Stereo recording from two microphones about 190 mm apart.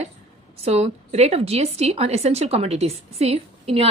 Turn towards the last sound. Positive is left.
turn(degrees=-30)  # may be behind; listen again after turning